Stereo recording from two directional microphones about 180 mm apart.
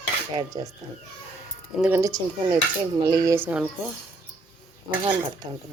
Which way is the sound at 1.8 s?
15° right (ahead or behind).